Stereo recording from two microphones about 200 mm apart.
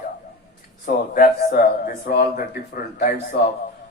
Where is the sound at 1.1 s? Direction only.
45° left (ahead or behind).